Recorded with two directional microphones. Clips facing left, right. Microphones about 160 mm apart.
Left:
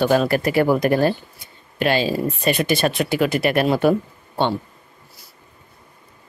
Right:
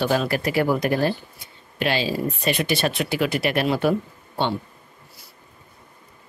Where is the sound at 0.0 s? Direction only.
45° left (ahead or behind).